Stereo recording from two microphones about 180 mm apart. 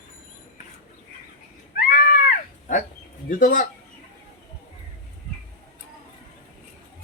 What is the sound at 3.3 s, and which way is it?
Speech, 50° left (ahead or behind).